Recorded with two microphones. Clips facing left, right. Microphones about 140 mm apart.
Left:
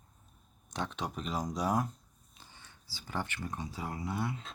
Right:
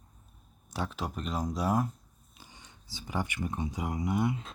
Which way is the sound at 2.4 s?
15° right (ahead or behind).